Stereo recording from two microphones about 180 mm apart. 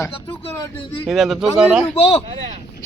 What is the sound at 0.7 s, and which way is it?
Speech, 25° left (ahead or behind).